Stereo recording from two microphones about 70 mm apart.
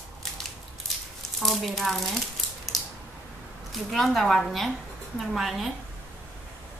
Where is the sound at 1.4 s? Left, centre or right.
Centre.